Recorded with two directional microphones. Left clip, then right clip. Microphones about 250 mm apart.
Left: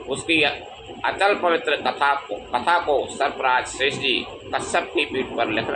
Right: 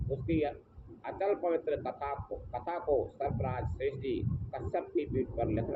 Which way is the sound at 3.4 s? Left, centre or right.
Left.